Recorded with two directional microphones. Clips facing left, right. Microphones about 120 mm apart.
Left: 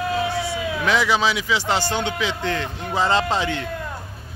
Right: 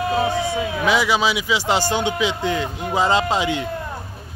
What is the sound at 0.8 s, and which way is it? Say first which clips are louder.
Speech: right 1 dB; 10° right (ahead or behind).